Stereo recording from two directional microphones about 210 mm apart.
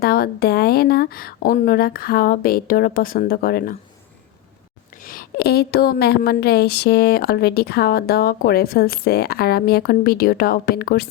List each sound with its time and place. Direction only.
0.0 s a woman's voice: 45° left (ahead or behind)
5.0 s a woman's voice: 45° left (ahead or behind)